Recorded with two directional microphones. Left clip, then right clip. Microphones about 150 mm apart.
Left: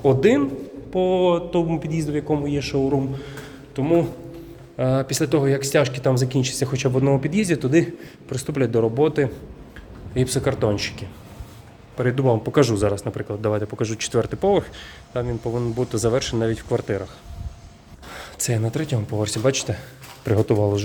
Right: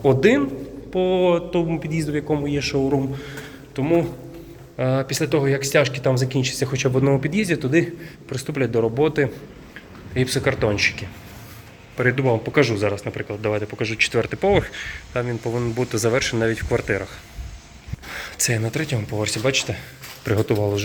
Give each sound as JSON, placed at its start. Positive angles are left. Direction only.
{"t": 0.0, "sound": "a man's voice", "side_deg": 10}
{"t": 1.5, "sound": "speech", "side_deg": 30}
{"t": 1.9, "sound": "a man's voice", "side_deg": 10}
{"t": 6.8, "sound": "a man's voice", "side_deg": 10}
{"t": 7.3, "sound": "speech", "side_deg": 25}
{"t": 12.1, "sound": "speech", "side_deg": 35}
{"t": 15.2, "sound": "a man's voice", "side_deg": 10}
{"t": 15.8, "sound": "a man's voice", "side_deg": 20}
{"t": 18.1, "sound": "speech", "side_deg": 20}
{"t": 20.2, "sound": "speech", "side_deg": 25}